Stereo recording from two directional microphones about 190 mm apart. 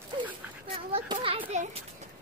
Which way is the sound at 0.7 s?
30° right (ahead or behind).